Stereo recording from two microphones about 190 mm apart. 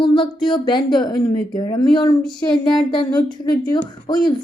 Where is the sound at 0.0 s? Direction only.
25° left (ahead or behind).